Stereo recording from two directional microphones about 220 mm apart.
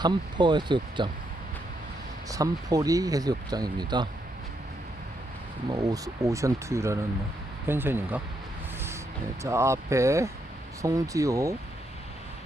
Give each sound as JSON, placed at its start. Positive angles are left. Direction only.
{"t": 0.0, "sound": "speech", "side_deg": -20}
{"t": 2.3, "sound": "speech", "side_deg": -15}
{"t": 5.7, "sound": "speech", "side_deg": -15}
{"t": 9.4, "sound": "speech", "side_deg": -15}